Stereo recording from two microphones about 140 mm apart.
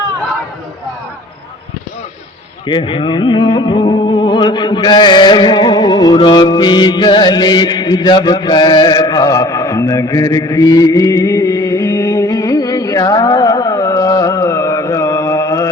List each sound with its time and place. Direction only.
2.6 s music: 35° left (ahead or behind)